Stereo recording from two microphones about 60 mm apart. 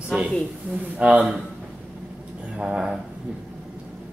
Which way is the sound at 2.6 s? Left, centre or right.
Centre.